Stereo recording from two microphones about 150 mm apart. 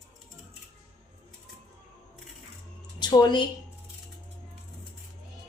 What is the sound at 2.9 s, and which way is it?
Speech, 30° left (ahead or behind).